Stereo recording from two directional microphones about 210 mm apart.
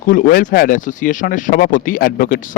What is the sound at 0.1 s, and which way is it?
Speech, 45° left (ahead or behind).